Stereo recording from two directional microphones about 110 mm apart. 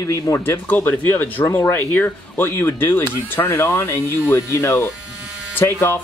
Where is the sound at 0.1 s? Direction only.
25° left (ahead or behind).